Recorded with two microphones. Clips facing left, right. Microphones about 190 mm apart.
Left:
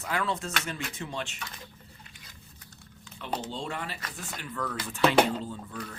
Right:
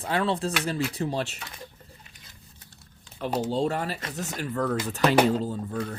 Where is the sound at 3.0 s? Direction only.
40° right (ahead or behind).